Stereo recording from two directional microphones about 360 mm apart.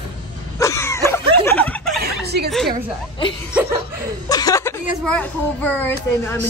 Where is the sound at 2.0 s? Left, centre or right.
Right.